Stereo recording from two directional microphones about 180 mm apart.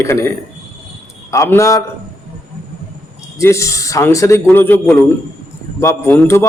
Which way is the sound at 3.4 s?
15° left (ahead or behind).